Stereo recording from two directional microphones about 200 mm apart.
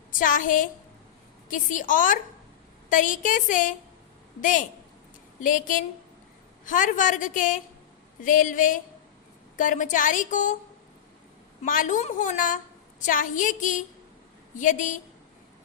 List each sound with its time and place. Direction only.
0.1 s a woman's voice: 40° left (ahead or behind)
11.6 s a woman's voice: 40° left (ahead or behind)